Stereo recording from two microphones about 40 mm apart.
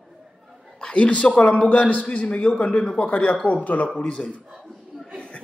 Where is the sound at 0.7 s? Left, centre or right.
Left.